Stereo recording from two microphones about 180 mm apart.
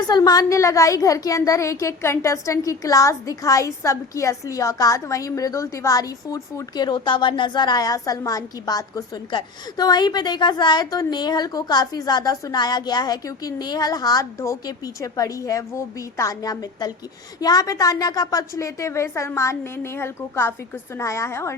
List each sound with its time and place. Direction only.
0.1 s a woman's voice: 20° left (ahead or behind)